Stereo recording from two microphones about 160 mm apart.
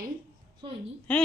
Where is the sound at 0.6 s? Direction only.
30° right (ahead or behind).